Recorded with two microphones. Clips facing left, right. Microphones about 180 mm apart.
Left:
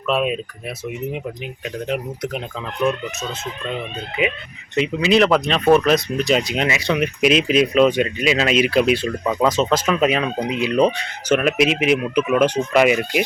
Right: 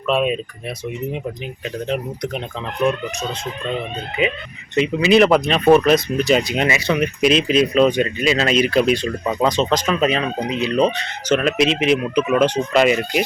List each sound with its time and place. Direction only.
0.1 s speech: 5° left (ahead or behind)
1.9 s speech: 5° left (ahead or behind)
4.2 s speech: 5° left (ahead or behind)